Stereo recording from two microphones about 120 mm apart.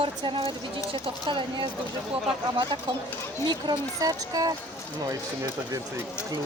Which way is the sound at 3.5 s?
35° right (ahead or behind).